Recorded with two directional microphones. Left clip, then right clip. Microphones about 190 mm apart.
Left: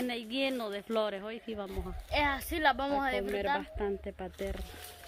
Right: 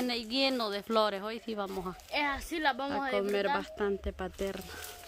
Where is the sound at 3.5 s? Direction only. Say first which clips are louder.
Right 1 dB; 25° right (ahead or behind).